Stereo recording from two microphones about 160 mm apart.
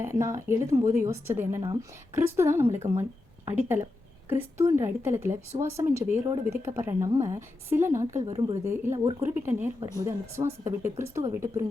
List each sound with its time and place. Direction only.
0.0 s a woman's voice: 20° right (ahead or behind)